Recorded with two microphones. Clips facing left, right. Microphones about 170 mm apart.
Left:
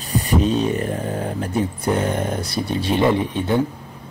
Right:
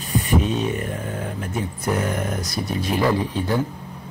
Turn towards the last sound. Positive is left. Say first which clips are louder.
# left 3 dB
turn(degrees=20)  # may be behind; listen again after turning